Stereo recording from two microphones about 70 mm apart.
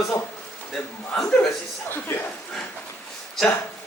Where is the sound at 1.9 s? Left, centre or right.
Left.